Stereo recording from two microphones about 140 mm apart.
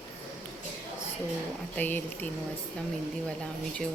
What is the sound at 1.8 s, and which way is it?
Speech, 10° left (ahead or behind).